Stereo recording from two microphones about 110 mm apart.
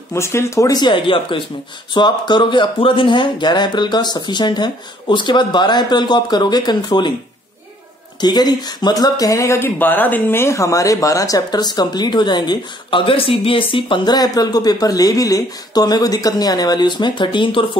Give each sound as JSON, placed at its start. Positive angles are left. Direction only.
{"t": 0.1, "sound": "speech", "side_deg": 25}
{"t": 8.2, "sound": "speech", "side_deg": 40}